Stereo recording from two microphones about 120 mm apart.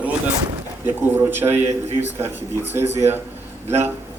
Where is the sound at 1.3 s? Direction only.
15° right (ahead or behind).